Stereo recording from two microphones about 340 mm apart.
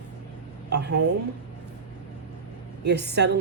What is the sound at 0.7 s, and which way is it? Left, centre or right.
Speech, right.